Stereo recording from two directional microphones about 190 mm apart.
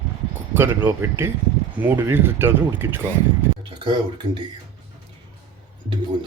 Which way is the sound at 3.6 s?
25° right (ahead or behind).